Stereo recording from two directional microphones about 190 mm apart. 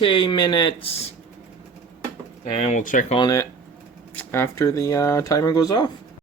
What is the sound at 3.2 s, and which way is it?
Speech, 20° left (ahead or behind).